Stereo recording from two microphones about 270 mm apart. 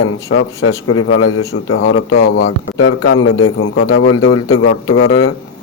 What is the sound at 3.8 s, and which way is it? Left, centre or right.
Speech, left.